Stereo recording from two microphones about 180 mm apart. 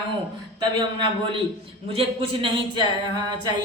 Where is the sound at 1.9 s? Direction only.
30° right (ahead or behind).